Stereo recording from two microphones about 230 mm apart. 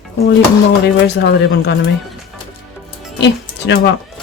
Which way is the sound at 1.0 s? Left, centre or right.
Left.